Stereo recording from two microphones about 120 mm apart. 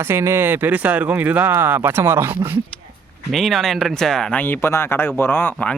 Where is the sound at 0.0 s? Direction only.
20° right (ahead or behind).